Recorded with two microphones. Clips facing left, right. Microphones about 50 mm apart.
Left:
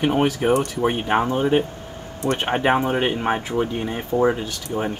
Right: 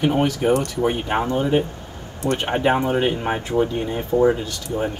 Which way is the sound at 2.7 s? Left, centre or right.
Centre.